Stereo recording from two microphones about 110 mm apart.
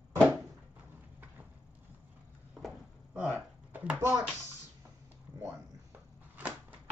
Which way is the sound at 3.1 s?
15° right (ahead or behind).